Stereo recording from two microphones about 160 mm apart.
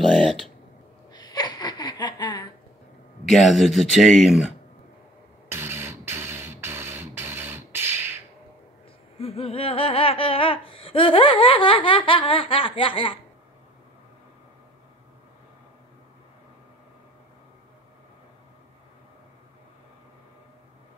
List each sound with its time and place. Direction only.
1.1 s laughter: 25° left (ahead or behind)
3.3 s speech: centre (ahead or behind)
5.5 s a sound: 15° right (ahead or behind)
9.2 s laughter: 35° left (ahead or behind)